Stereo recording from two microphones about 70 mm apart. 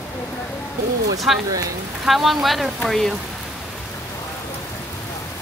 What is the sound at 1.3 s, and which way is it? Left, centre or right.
Speech, centre.